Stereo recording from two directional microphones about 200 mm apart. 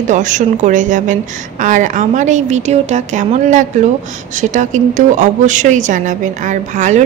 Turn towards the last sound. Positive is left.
turn(degrees=-40)  # may be behind; listen again after turning